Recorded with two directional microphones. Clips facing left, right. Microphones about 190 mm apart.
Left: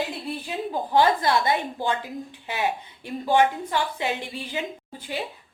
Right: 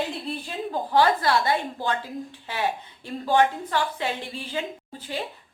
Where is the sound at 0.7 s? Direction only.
15° left (ahead or behind).